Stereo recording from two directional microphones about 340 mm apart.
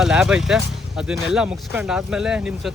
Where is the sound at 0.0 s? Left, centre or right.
Centre.